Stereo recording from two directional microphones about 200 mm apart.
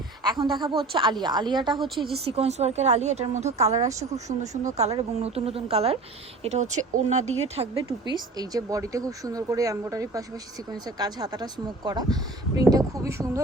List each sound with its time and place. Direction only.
0.3 s speech: 25° right (ahead or behind)
7.9 s speech: 20° right (ahead or behind)